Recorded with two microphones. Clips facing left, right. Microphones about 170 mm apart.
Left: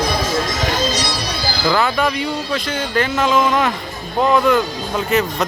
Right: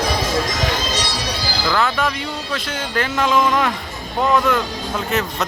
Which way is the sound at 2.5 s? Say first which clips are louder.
Left 2 dB; centre (ahead or behind).